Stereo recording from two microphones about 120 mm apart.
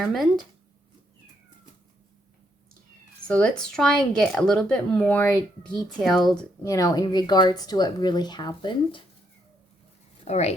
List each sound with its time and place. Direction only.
0.0 s speech: centre (ahead or behind)
3.2 s speech: 10° left (ahead or behind)
5.6 s speech: centre (ahead or behind)
6.6 s speech: 25° left (ahead or behind)
10.2 s speech: 65° left (ahead or behind)